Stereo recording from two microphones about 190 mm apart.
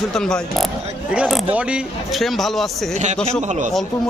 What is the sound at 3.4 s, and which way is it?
Speech, 40° right (ahead or behind).